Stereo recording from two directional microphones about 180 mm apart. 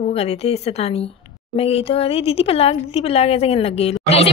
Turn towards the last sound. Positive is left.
turn(degrees=35)  # may be behind; listen again after turning